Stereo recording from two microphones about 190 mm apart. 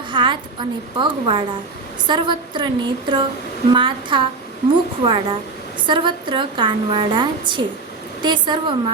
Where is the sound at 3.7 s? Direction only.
25° right (ahead or behind).